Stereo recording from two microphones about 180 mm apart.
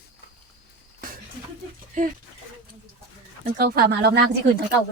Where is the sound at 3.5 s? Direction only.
60° right (ahead or behind).